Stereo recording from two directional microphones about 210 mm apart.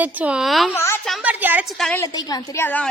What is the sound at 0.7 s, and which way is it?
Speech, 10° left (ahead or behind).